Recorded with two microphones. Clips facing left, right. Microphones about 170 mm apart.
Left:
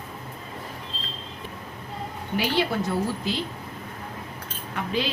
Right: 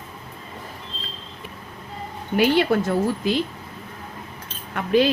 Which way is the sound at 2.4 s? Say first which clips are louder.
Right 7 dB; 50° right (ahead or behind).